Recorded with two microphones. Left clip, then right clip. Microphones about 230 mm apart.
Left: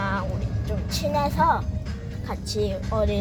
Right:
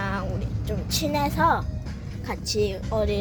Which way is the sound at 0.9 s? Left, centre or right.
Right.